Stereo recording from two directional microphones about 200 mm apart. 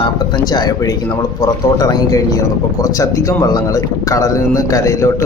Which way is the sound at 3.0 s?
15° left (ahead or behind).